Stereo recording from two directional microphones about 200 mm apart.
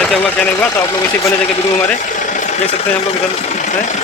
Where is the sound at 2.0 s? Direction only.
40° left (ahead or behind).